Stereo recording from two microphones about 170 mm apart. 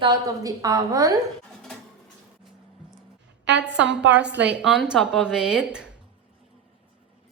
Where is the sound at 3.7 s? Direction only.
90° right.